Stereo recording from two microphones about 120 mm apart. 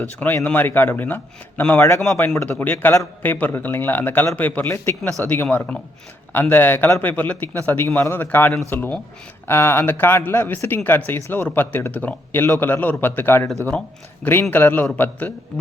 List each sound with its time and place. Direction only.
0.0 s a man's voice: 15° left (ahead or behind)
14.5 s a man's voice: 15° left (ahead or behind)